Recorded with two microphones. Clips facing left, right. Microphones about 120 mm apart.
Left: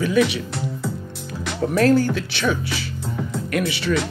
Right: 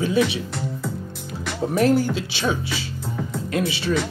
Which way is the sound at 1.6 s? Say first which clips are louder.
Left 2 dB; 20° right (ahead or behind).